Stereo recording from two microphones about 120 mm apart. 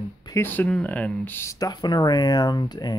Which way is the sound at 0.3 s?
15° left (ahead or behind).